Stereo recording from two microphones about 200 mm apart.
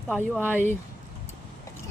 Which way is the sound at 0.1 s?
10° left (ahead or behind).